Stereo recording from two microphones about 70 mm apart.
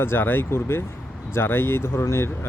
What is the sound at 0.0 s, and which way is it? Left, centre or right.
Speech, left.